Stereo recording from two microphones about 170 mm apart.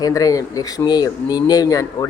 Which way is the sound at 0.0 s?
20° left (ahead or behind).